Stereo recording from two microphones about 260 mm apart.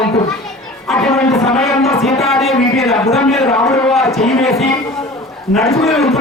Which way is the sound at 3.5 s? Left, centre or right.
Centre.